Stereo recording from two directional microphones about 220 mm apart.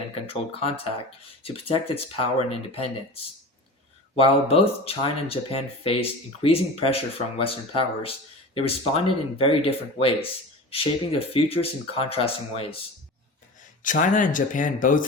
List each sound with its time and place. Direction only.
1.5 s speech: 25° left (ahead or behind)
4.1 s speech: 25° left (ahead or behind)
13.8 s speech: 35° left (ahead or behind)